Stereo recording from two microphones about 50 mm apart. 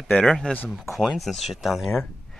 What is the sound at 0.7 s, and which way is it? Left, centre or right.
Speech, centre.